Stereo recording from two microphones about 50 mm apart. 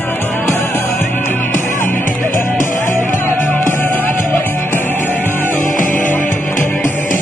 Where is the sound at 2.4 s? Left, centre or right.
Left.